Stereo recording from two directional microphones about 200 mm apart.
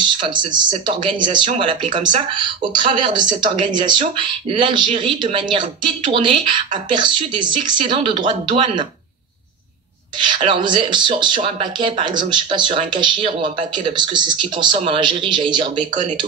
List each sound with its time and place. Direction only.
0.0 s speech: 25° right (ahead or behind)
10.1 s speech: 25° right (ahead or behind)